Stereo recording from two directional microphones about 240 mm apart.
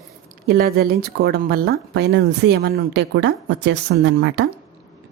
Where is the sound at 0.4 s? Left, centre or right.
Right.